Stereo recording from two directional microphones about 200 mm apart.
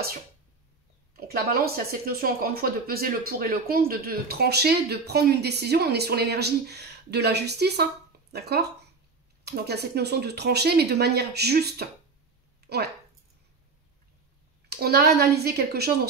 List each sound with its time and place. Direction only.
1.1 s speech: 50° right (ahead or behind)
12.6 s a sound: 55° right (ahead or behind)
14.7 s speech: 55° right (ahead or behind)